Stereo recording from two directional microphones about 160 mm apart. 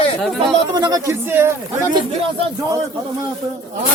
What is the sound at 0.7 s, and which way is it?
Speech, 25° right (ahead or behind).